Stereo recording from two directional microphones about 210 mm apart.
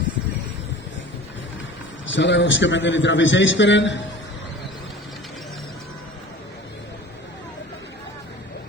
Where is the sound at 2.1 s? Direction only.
60° left (ahead or behind).